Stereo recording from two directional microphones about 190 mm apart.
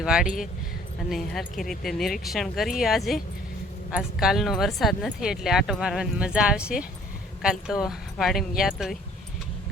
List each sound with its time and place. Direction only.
0.0 s speech: 5° right (ahead or behind)